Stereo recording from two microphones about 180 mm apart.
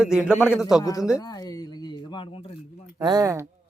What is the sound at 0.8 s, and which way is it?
Speech, 20° left (ahead or behind).